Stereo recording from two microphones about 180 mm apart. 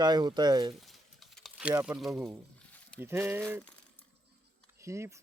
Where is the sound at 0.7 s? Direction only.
Centre (ahead or behind).